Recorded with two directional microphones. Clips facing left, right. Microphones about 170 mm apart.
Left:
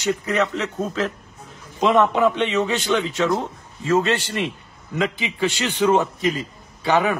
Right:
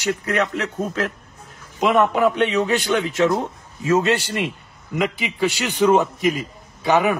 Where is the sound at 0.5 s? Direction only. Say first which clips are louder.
Even; 5° right (ahead or behind).